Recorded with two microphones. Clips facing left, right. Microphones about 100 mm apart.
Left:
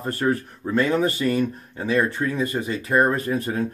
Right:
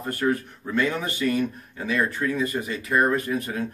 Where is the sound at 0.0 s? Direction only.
35° left (ahead or behind).